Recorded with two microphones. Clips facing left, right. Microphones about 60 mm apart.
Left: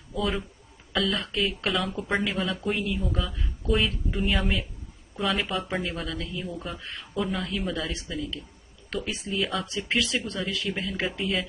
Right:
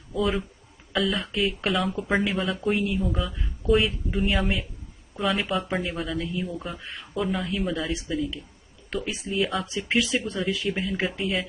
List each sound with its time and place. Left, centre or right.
0.1 s speech: centre
10.1 s speech: centre